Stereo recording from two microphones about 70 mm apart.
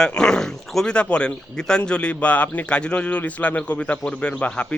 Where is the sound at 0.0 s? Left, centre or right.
Centre.